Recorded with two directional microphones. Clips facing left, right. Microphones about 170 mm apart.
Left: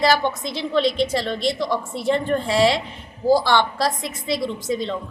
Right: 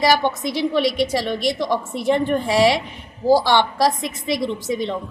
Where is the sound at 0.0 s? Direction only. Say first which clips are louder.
Right 1 dB; 15° right (ahead or behind).